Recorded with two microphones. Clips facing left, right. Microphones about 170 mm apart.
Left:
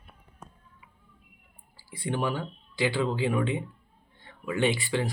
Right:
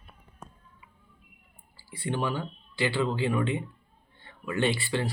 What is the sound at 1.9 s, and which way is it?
Speech, 15° left (ahead or behind).